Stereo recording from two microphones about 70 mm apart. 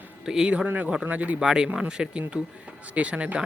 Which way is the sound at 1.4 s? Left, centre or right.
Centre.